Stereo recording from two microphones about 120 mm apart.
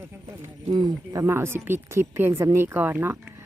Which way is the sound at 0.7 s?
35° right (ahead or behind).